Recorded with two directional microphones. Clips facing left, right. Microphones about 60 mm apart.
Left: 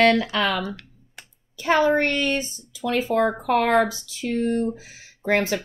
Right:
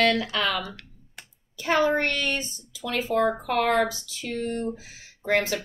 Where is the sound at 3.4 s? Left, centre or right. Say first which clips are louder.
Left 4 dB; left.